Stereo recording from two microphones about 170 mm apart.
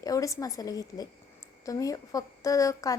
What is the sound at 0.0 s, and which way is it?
A woman's voice, 20° left (ahead or behind).